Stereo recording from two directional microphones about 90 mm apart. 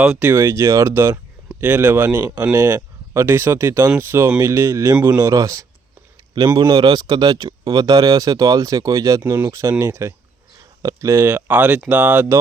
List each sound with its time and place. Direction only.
0.2 s speech: 25° right (ahead or behind)
6.6 s speech: 50° right (ahead or behind); by 12.4 s 20° right (ahead or behind)